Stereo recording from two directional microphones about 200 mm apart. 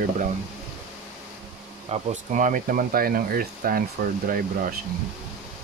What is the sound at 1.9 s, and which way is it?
Speech, 40° right (ahead or behind).